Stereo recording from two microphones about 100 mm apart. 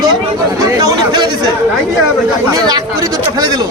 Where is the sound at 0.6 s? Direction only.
35° right (ahead or behind).